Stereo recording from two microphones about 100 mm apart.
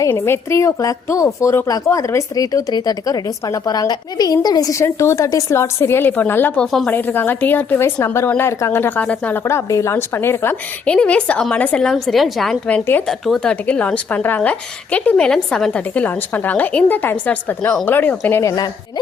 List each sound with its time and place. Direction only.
0.1 s a woman's voice: 25° left (ahead or behind)
4.8 s a woman's voice: 30° left (ahead or behind)
6.6 s speech: centre (ahead or behind)
6.8 s a woman's voice: 20° left (ahead or behind)
9.4 s a woman's voice: 25° left (ahead or behind)